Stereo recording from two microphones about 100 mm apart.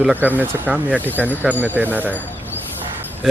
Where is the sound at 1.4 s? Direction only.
20° right (ahead or behind).